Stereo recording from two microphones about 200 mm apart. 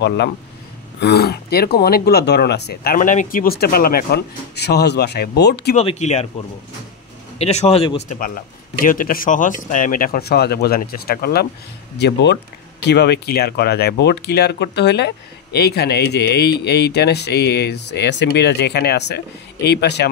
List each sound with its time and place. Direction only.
1.0 s speech: 55° left (ahead or behind)
5.8 s a man's voice: 35° left (ahead or behind)
7.3 s a man's voice: 30° left (ahead or behind)
8.2 s speech: 45° left (ahead or behind)